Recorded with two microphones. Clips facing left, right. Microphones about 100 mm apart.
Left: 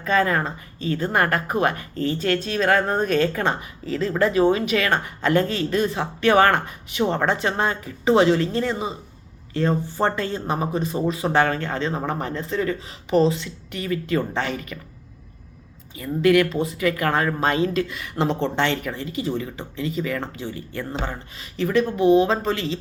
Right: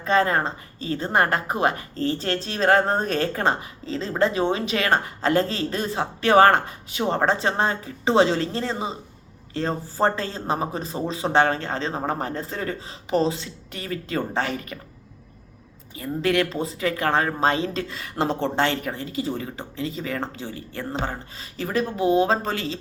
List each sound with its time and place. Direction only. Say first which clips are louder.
0.0 s a woman's voice: even; 30° right (ahead or behind)
16.0 s a woman's voice: left 5 dB; 30° right (ahead or behind)